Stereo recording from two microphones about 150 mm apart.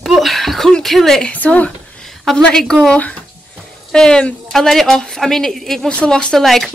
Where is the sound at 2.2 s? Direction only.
5° left (ahead or behind).